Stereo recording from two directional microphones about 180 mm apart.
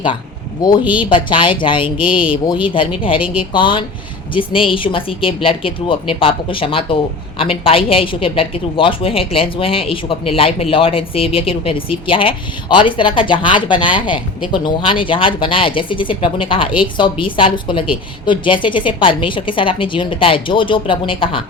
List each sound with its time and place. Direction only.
0.6 s a woman's voice: 25° left (ahead or behind)